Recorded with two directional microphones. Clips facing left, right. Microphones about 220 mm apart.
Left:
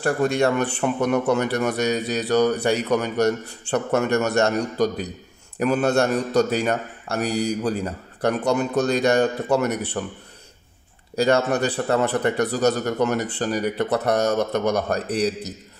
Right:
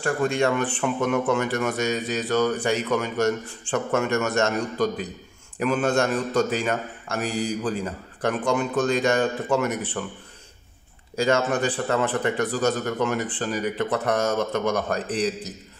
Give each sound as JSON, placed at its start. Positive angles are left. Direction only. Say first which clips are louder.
{"t": 0.0, "sound": "a man's voice", "louder": "left 2 dB", "side_deg": 40}
{"t": 11.1, "sound": "a man's voice", "louder": "left 3 dB", "side_deg": 35}